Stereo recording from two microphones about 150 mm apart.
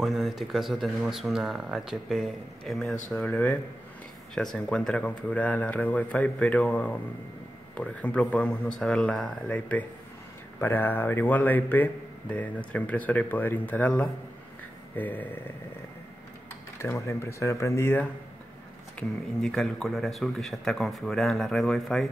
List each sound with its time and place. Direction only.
0.0 s a man's voice: centre (ahead or behind)
16.8 s a man's voice: 15° left (ahead or behind)
18.9 s speech: 5° left (ahead or behind)